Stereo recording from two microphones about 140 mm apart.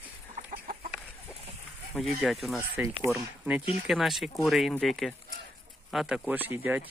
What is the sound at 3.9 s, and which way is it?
Speech, centre (ahead or behind).